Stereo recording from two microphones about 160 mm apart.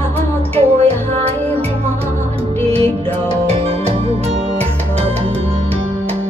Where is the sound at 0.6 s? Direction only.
40° right (ahead or behind).